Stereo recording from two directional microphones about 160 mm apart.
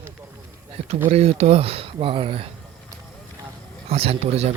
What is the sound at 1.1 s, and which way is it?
Speech, 40° right (ahead or behind).